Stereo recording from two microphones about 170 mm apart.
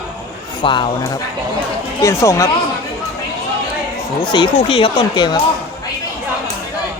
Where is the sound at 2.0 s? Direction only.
20° left (ahead or behind).